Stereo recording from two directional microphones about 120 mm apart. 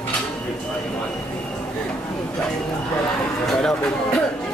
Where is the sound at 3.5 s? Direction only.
5° left (ahead or behind).